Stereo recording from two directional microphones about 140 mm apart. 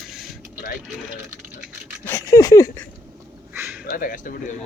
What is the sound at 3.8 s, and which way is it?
Speech, 85° left.